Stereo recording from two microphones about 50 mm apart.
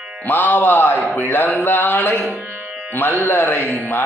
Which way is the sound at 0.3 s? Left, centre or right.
Left.